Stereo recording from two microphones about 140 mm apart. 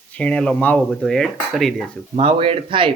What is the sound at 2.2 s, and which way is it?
Speech, 40° right (ahead or behind).